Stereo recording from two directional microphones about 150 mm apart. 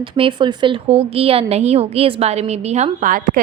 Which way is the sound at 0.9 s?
40° right (ahead or behind).